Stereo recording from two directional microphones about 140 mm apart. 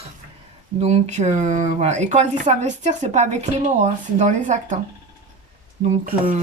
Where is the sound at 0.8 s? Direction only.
55° right (ahead or behind).